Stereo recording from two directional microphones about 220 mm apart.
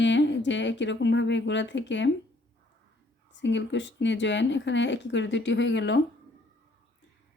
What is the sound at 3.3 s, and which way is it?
Speech, 55° left (ahead or behind).